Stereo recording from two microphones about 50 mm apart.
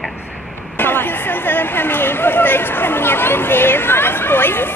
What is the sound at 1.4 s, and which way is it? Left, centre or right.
Speech, left.